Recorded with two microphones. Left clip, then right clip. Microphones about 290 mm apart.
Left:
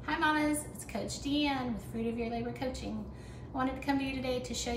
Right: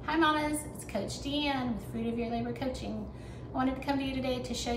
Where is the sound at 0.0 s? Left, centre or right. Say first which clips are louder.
Right 2 dB; centre.